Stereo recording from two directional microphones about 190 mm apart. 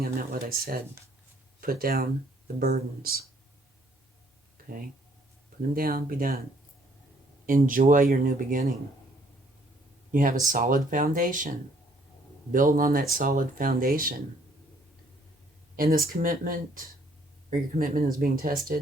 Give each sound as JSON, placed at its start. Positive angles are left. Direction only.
{"t": 0.0, "sound": "speech", "side_deg": -50}
{"t": 4.6, "sound": "a sound", "side_deg": -50}
{"t": 5.7, "sound": "speech", "side_deg": -50}
{"t": 7.4, "sound": "speech", "side_deg": -45}
{"t": 10.1, "sound": "speech", "side_deg": -45}
{"t": 15.7, "sound": "speech", "side_deg": -50}